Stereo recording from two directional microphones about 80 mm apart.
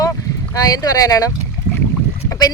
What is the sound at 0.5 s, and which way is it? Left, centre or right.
Speech, left.